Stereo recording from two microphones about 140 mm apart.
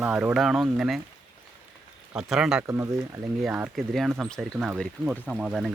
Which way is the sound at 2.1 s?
5° right (ahead or behind).